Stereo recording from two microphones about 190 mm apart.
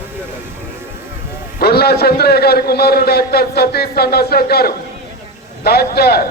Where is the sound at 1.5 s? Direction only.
55° left (ahead or behind).